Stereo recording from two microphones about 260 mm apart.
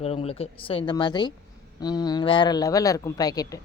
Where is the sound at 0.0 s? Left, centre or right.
Left.